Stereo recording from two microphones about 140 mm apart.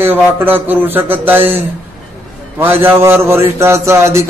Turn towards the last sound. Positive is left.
turn(degrees=-20)  # may be behind; listen again after turning